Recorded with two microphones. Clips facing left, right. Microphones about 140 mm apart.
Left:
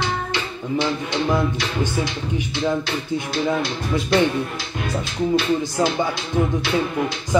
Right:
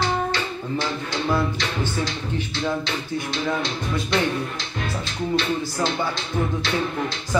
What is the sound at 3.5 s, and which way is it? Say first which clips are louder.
Speech: left 3 dB; 5° left (ahead or behind).